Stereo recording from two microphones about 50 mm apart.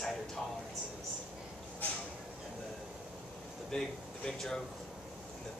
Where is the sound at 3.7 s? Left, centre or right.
Centre.